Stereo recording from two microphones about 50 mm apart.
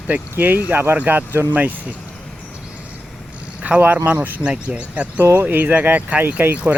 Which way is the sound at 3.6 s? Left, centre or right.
Right.